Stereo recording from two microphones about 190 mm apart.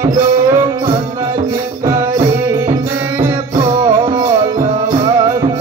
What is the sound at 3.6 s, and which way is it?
Music, 20° right (ahead or behind).